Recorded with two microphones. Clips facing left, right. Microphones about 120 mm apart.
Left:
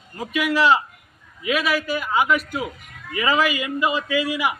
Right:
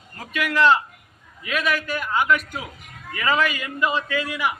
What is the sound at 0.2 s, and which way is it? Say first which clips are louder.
A man's voice: left 1 dB; 10° left (ahead or behind).